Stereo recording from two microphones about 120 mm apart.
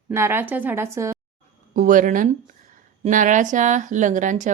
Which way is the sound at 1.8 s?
90° right.